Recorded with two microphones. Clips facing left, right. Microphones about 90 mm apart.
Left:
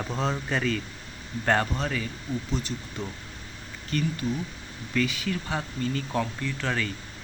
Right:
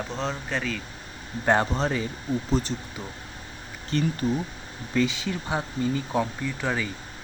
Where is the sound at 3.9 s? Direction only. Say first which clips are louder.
Right 3 dB; 30° right (ahead or behind); by 6.9 s 15° right (ahead or behind).